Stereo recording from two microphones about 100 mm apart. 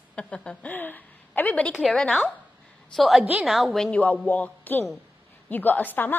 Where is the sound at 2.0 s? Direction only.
5° left (ahead or behind).